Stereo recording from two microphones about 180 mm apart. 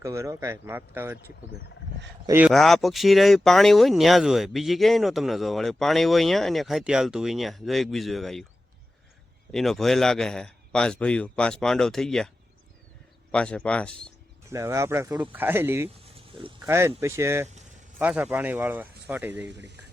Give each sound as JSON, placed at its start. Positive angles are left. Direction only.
{"t": 0.0, "sound": "speech", "side_deg": -15}
{"t": 2.2, "sound": "speech", "side_deg": -15}
{"t": 2.5, "sound": "speech", "side_deg": 0}
{"t": 9.5, "sound": "speech", "side_deg": 0}
{"t": 13.3, "sound": "speech", "side_deg": 5}
{"t": 14.5, "sound": "speech", "side_deg": -15}
{"t": 16.0, "sound": "a sound", "side_deg": -30}
{"t": 16.6, "sound": "speech", "side_deg": -15}
{"t": 17.5, "sound": "vehicle", "side_deg": -40}
{"t": 18.0, "sound": "speech", "side_deg": -5}
{"t": 19.5, "sound": "speech", "side_deg": -75}